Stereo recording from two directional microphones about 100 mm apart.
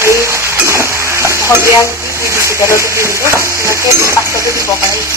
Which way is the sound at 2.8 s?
30° right (ahead or behind).